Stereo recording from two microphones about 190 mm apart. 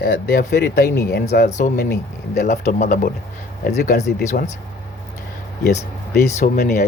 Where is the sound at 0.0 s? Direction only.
60° left (ahead or behind).